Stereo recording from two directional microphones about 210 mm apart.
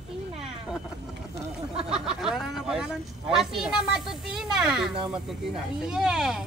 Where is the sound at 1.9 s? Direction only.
5° right (ahead or behind).